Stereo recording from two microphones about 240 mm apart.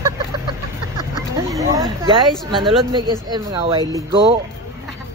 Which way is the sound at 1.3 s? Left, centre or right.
Centre.